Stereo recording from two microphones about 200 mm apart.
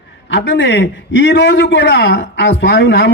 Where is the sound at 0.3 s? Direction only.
65° left (ahead or behind).